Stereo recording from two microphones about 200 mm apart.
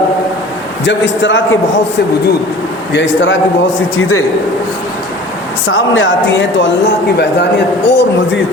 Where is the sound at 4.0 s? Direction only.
90° left.